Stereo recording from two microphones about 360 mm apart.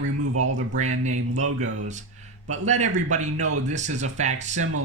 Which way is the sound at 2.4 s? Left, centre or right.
Centre.